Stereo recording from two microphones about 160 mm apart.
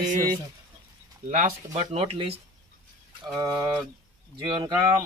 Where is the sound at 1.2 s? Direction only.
50° right (ahead or behind).